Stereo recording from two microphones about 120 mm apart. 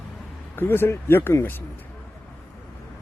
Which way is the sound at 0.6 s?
20° left (ahead or behind).